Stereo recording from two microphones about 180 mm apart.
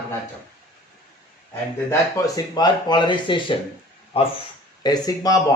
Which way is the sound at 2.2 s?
20° left (ahead or behind).